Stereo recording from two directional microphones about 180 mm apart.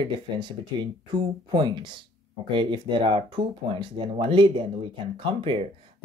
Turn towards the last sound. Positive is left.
turn(degrees=-30)  # may be behind; listen again after turning